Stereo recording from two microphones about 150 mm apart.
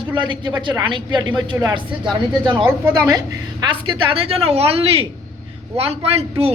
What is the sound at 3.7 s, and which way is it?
Speech, 35° right (ahead or behind).